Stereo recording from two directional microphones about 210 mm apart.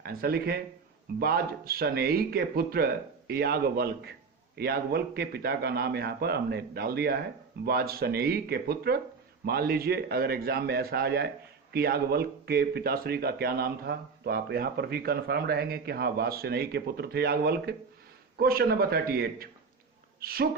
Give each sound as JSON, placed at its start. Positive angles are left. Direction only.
{"t": 0.0, "sound": "a woman's voice", "side_deg": -45}